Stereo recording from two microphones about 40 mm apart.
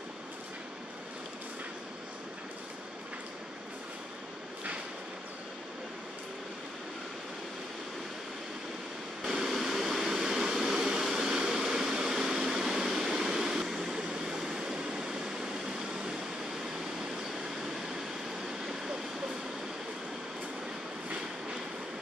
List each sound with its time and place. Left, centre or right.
9.2 s vehicle: centre